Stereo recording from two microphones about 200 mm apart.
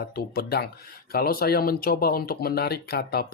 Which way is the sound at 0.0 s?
50° left (ahead or behind).